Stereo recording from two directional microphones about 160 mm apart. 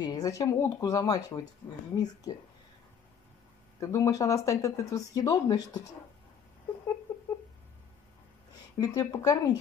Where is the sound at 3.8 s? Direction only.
20° left (ahead or behind).